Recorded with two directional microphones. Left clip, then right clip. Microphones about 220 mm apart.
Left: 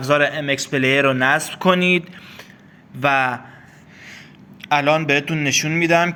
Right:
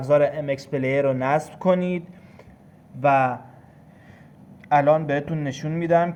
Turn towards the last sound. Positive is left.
turn(degrees=5)  # may be behind; listen again after turning